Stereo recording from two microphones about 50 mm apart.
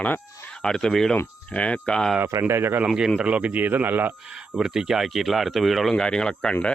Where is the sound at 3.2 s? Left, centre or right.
Right.